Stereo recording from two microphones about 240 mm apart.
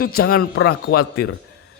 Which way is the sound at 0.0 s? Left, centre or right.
Left.